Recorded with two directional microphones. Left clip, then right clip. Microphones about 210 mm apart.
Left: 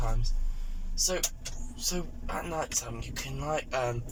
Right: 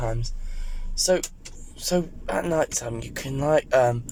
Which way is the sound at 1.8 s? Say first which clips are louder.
Right 10 dB; 40° right (ahead or behind).